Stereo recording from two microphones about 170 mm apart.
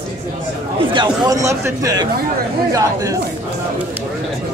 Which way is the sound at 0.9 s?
25° right (ahead or behind).